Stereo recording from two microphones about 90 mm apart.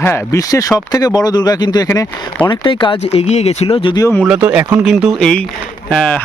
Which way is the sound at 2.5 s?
65° left (ahead or behind).